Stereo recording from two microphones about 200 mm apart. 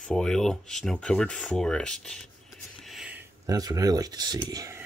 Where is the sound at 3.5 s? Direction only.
20° right (ahead or behind).